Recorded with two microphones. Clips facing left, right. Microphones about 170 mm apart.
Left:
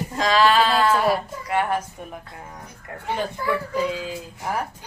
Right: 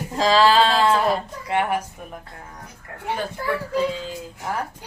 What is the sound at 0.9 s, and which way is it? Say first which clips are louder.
Speech: even; 5° left (ahead or behind).